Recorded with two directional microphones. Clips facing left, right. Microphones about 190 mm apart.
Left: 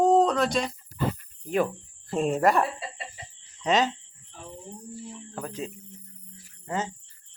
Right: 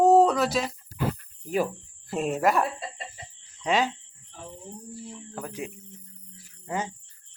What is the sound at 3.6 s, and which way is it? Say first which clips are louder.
Speech: left 1 dB; 10° right (ahead or behind).